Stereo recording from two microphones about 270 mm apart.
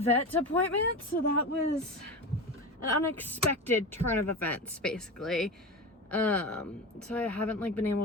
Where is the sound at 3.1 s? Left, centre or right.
Centre.